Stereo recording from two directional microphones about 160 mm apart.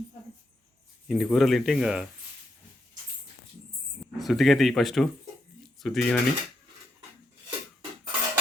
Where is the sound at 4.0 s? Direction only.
Centre (ahead or behind).